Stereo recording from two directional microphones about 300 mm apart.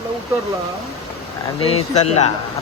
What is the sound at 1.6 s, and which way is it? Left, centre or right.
Speech, left.